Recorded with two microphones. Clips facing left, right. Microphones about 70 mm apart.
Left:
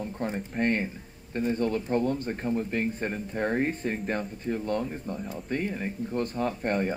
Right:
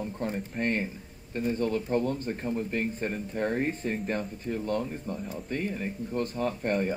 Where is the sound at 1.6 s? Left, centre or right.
Left.